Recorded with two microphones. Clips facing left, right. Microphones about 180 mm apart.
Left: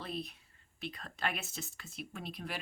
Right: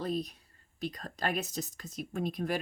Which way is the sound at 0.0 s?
40° right (ahead or behind).